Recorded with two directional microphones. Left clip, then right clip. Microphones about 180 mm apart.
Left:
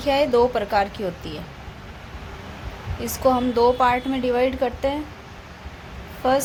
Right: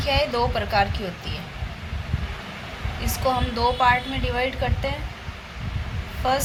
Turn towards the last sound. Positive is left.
turn(degrees=70)  # may be behind; listen again after turning